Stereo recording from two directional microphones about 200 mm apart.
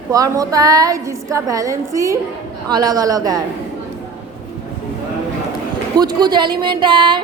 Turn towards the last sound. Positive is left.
turn(degrees=-25)  # may be behind; listen again after turning